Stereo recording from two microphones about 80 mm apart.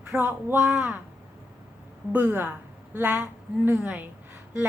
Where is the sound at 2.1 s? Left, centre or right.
Right.